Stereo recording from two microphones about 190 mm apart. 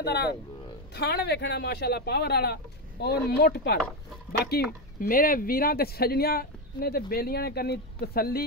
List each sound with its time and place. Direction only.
0.0 s speech: 60° left (ahead or behind)